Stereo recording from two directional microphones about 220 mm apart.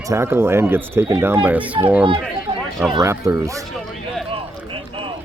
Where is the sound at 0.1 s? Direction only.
10° right (ahead or behind).